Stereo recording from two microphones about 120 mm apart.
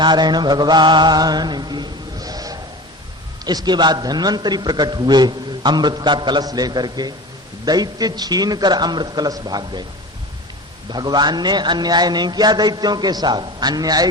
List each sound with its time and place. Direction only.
0.0 s mantra: 35° right (ahead or behind)
3.4 s a man's voice: 35° right (ahead or behind)
10.8 s a man's voice: 35° right (ahead or behind)